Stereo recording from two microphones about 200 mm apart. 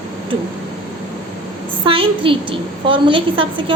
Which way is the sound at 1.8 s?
25° right (ahead or behind).